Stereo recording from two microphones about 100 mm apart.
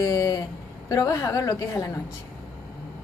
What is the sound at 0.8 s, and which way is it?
Speech, 35° left (ahead or behind).